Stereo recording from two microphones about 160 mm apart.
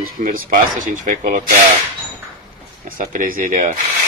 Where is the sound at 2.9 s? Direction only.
60° right (ahead or behind).